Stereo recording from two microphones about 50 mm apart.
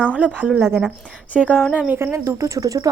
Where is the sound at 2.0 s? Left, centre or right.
Right.